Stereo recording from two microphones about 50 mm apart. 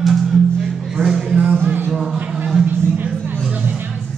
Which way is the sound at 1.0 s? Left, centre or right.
Centre.